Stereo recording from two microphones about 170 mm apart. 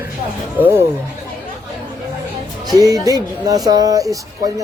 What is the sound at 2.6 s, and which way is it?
Speech, 20° right (ahead or behind).